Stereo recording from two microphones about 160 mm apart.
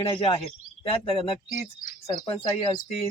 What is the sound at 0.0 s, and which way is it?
Speech, 35° left (ahead or behind).